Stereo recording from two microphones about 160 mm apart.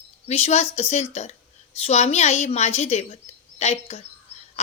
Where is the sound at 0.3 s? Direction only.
40° left (ahead or behind).